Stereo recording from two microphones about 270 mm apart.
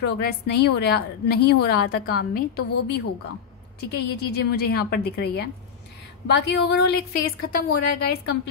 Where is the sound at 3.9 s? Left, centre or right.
Left.